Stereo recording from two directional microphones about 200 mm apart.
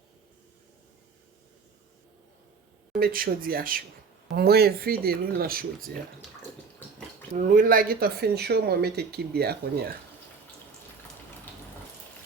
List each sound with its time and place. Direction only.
2.9 s speech: 45° right (ahead or behind)
7.3 s speech: 40° right (ahead or behind)